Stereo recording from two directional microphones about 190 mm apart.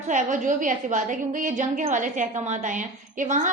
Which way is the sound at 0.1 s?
40° right (ahead or behind).